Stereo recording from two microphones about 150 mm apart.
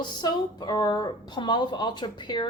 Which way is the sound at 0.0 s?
30° left (ahead or behind).